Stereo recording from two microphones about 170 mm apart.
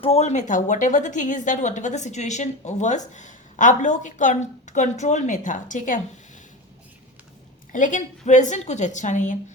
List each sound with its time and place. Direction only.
0.0 s a woman's voice: 40° left (ahead or behind)
7.7 s a woman's voice: 50° left (ahead or behind)